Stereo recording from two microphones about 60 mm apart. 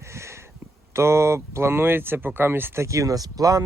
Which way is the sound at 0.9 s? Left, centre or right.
Right.